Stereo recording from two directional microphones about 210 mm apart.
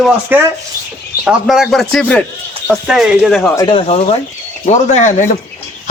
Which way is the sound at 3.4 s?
15° left (ahead or behind).